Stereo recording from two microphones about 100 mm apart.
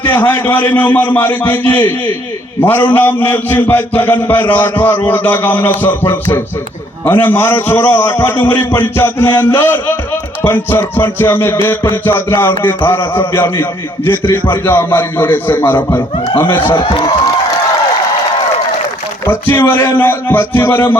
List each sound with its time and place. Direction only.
0.0 s a man's voice: 20° left (ahead or behind)
16.7 s speech: 55° left (ahead or behind)
19.2 s a man's voice: 20° left (ahead or behind)